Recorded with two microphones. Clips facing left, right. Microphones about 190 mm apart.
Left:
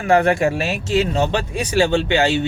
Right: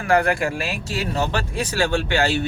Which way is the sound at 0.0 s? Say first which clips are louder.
Left 4 dB; 25° left (ahead or behind).